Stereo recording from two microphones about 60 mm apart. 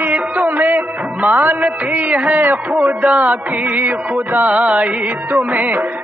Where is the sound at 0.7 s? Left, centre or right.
Right.